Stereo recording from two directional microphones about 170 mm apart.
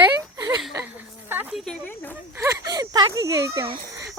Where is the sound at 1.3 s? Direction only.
10° right (ahead or behind).